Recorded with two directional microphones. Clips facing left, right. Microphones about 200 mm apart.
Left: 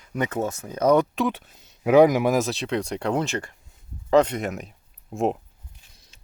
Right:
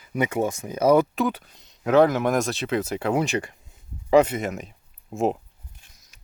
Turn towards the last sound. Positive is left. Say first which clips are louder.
# even
turn(degrees=0)  # may be behind; listen again after turning